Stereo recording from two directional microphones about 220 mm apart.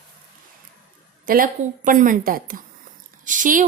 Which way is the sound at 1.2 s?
40° right (ahead or behind).